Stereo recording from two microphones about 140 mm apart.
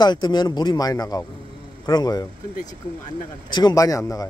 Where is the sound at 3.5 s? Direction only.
30° left (ahead or behind).